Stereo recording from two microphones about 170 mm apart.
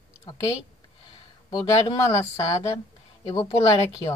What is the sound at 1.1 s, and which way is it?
Speech, 25° left (ahead or behind).